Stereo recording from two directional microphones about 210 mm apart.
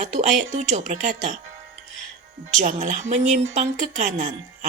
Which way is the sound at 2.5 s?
35° right (ahead or behind).